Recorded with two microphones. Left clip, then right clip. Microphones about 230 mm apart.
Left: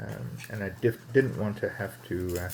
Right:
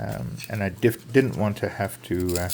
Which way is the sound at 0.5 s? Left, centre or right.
Right.